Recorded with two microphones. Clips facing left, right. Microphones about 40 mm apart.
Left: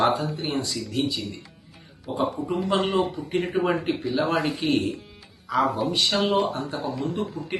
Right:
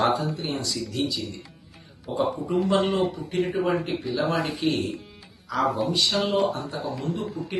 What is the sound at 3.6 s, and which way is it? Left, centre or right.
Speech, left.